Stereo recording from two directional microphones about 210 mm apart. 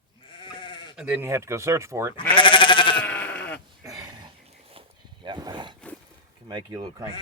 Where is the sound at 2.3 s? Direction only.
25° left (ahead or behind).